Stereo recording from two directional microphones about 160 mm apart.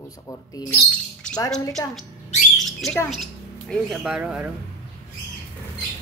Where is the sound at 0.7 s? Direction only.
5° left (ahead or behind).